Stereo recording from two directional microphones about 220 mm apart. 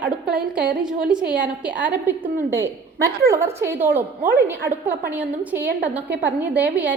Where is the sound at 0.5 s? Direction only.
5° right (ahead or behind).